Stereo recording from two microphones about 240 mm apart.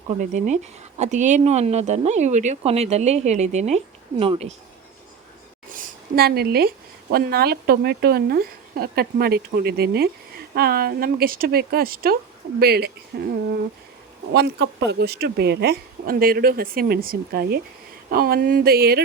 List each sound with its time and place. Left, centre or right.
0.2 s speech: right
5.7 s a woman's voice: right
14.3 s a woman's voice: right